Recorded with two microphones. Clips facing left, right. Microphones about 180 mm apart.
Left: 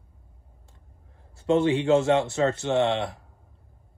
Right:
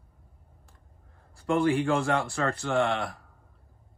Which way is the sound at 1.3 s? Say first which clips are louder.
Left 3 dB; 20° left (ahead or behind).